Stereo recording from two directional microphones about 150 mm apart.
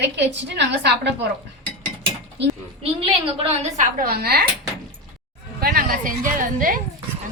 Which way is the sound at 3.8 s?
75° right (ahead or behind).